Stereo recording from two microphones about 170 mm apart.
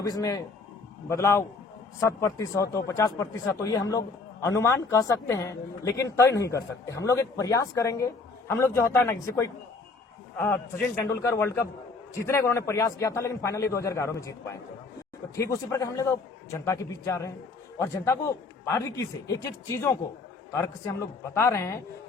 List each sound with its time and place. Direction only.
0.0 s a man's voice: 20° left (ahead or behind)